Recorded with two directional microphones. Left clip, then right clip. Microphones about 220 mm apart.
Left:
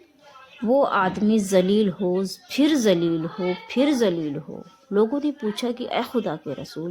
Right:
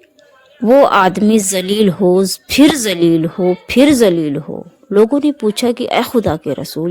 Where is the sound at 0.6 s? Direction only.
40° right (ahead or behind).